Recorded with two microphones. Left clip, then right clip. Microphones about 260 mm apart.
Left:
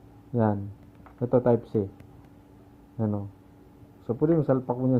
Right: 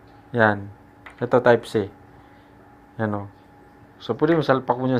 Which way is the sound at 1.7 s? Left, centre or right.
Right.